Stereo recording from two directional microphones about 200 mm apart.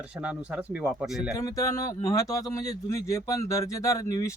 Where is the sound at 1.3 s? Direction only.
15° left (ahead or behind).